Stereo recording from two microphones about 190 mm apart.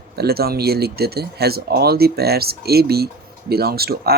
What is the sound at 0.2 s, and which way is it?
Speech, 55° right (ahead or behind).